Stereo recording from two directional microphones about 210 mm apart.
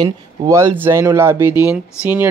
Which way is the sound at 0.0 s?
15° right (ahead or behind).